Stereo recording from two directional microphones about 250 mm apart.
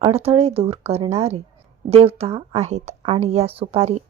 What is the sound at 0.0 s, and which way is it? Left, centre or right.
Speech, right.